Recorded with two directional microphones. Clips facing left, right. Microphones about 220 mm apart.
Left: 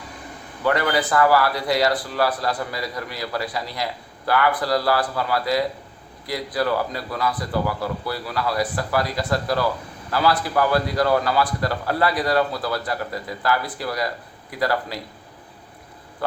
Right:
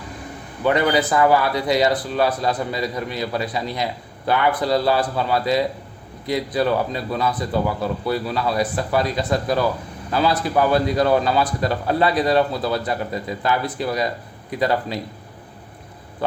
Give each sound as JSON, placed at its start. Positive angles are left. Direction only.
{"t": 0.6, "sound": "a man's voice", "side_deg": -20}